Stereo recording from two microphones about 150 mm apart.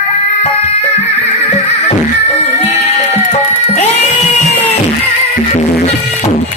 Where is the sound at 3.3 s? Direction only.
45° left (ahead or behind).